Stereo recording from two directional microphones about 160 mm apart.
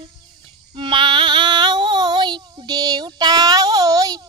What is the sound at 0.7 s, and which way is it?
Child singing, 30° right (ahead or behind).